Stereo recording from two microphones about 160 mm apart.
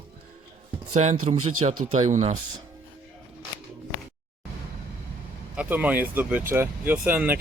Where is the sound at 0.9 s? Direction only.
45° right (ahead or behind).